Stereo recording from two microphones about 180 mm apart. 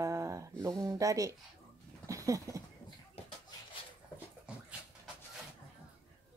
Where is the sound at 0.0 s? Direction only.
15° right (ahead or behind).